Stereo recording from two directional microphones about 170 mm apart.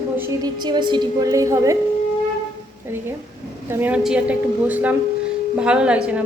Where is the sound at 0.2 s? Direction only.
25° right (ahead or behind).